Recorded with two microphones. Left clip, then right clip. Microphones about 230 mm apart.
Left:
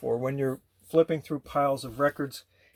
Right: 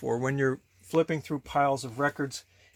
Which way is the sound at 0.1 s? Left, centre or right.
Right.